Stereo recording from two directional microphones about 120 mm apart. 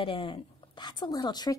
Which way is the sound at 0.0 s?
45° left (ahead or behind).